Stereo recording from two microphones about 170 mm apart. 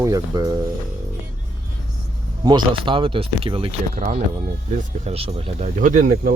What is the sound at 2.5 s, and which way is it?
Speech, 30° right (ahead or behind).